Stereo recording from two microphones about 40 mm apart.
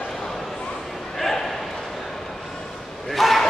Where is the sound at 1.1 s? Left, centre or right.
Centre.